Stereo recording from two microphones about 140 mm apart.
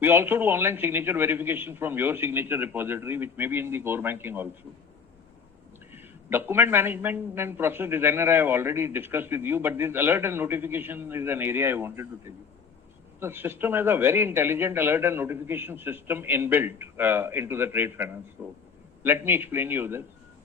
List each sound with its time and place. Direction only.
0.0 s a man's voice: 15° right (ahead or behind)
5.9 s a man's voice: 15° right (ahead or behind)
13.1 s a man's voice: 15° right (ahead or behind)